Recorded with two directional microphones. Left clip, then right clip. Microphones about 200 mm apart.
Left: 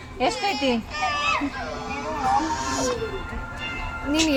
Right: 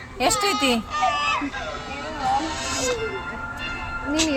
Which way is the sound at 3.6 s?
25° right (ahead or behind).